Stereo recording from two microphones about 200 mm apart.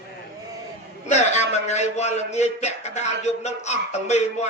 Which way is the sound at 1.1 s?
35° left (ahead or behind).